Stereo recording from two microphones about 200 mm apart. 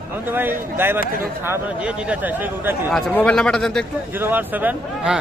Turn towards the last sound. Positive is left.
turn(degrees=-5)  # may be behind; listen again after turning